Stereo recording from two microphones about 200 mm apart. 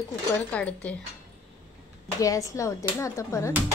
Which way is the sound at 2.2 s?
15° left (ahead or behind).